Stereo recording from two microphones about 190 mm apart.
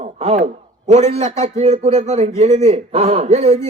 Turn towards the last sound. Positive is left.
turn(degrees=-35)  # may be behind; listen again after turning